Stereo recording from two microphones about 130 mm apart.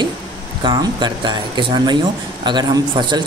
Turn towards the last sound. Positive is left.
turn(degrees=-35)  # may be behind; listen again after turning